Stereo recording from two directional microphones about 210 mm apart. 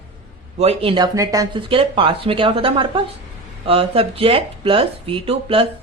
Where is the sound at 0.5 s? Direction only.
30° right (ahead or behind).